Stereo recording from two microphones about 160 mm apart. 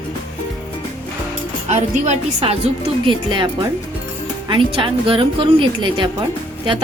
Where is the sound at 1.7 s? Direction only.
45° right (ahead or behind).